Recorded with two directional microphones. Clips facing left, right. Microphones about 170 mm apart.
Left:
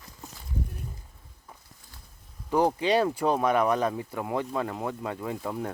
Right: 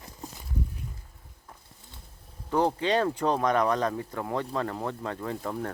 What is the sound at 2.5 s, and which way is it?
Speech, 10° left (ahead or behind).